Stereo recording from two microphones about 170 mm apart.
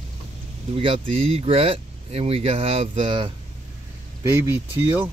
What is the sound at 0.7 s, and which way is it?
Speech, 30° right (ahead or behind).